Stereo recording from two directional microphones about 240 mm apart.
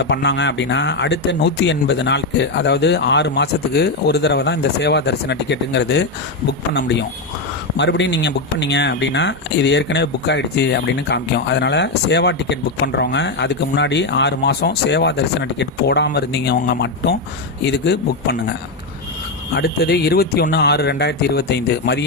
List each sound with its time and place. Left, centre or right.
0.0 s speech: left
7.8 s speech: left
19.5 s speech: left